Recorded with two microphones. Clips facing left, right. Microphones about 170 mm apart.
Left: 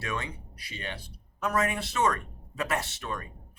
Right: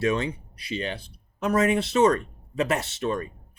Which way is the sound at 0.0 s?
25° right (ahead or behind).